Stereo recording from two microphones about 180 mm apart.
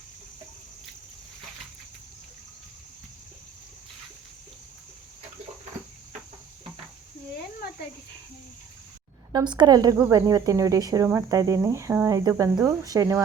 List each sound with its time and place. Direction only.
9.3 s speech: 25° right (ahead or behind)